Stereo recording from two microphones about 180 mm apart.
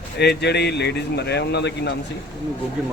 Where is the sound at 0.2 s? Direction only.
65° left (ahead or behind).